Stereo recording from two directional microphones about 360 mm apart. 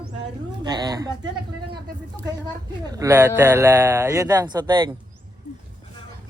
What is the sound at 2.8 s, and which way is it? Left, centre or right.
Speech, centre.